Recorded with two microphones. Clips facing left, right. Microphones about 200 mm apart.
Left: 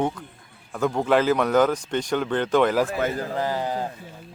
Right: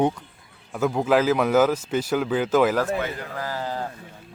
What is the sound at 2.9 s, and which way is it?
Speech, 45° left (ahead or behind).